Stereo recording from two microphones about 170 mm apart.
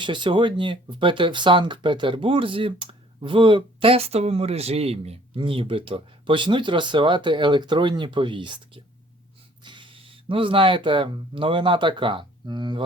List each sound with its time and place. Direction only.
0.0 s speech: 30° right (ahead or behind)